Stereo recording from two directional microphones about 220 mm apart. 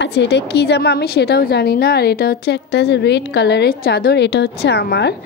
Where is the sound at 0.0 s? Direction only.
50° left (ahead or behind).